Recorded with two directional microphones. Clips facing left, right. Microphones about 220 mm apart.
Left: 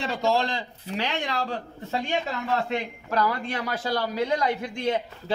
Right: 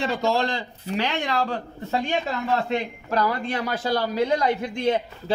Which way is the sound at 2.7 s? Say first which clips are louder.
Right 3 dB; 25° right (ahead or behind).